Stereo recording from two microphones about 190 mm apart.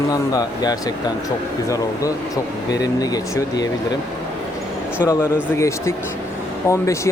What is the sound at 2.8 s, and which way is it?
Speech, 20° left (ahead or behind).